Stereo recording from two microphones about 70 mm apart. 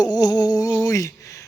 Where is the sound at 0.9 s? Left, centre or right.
Left.